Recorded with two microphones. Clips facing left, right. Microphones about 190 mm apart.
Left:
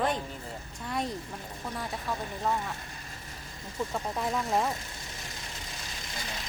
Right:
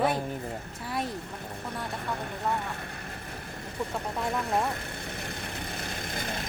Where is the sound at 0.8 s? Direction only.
5° right (ahead or behind).